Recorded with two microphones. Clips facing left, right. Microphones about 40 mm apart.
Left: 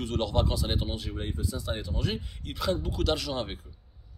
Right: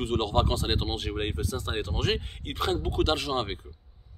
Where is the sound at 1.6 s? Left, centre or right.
Right.